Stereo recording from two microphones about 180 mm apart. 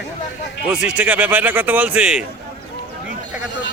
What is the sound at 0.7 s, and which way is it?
Speech, 5° right (ahead or behind).